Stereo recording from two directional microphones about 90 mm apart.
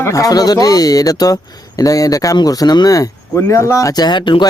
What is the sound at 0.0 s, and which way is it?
Speech, 40° left (ahead or behind).